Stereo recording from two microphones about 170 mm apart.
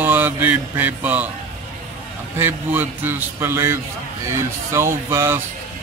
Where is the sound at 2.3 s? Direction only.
10° right (ahead or behind).